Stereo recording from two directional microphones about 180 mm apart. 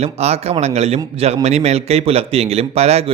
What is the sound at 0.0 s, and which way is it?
A man's voice, 35° right (ahead or behind).